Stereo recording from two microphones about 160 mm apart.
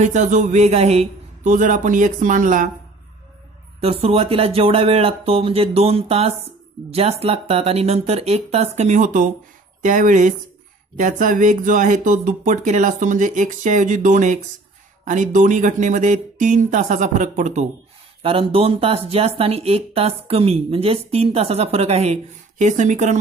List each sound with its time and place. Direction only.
0.0 s speech: 50° right (ahead or behind)
3.8 s speech: 40° right (ahead or behind)
18.2 s speech: 35° right (ahead or behind)